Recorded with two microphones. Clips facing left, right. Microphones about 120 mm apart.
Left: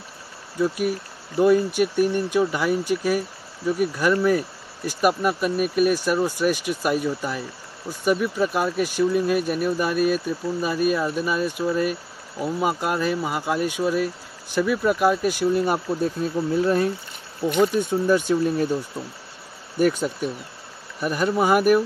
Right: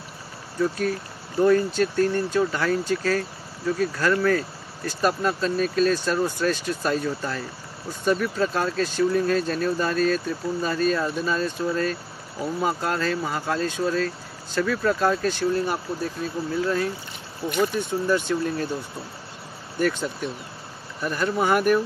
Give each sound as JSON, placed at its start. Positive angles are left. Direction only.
{"t": 0.6, "sound": "speech", "side_deg": 15}
{"t": 19.8, "sound": "speech", "side_deg": 10}